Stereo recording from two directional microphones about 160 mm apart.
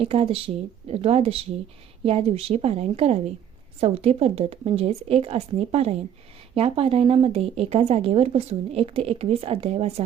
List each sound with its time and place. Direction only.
0.0 s speech: 40° right (ahead or behind)